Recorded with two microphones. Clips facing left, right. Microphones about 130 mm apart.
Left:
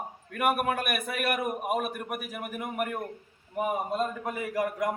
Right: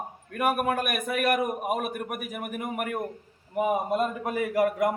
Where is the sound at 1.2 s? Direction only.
5° left (ahead or behind).